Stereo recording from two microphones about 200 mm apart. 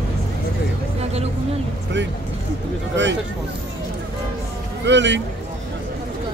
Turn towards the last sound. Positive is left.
turn(degrees=-65)  # may be behind; listen again after turning